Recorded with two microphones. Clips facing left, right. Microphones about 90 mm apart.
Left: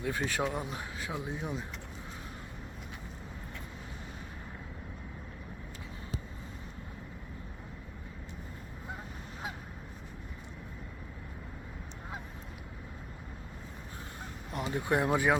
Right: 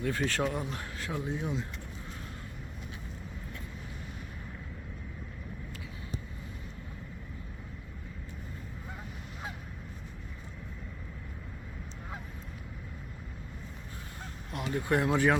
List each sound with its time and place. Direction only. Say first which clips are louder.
0.0 s speech: right 2 dB; 15° left (ahead or behind)
14.5 s speech: right 1 dB; 15° left (ahead or behind)